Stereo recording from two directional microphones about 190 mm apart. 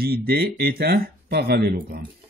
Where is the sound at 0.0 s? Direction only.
55° right (ahead or behind).